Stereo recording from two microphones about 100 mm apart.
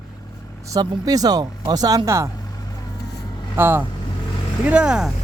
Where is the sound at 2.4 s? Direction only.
40° left (ahead or behind).